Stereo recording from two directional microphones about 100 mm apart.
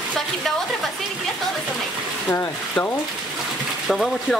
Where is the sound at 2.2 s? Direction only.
25° left (ahead or behind).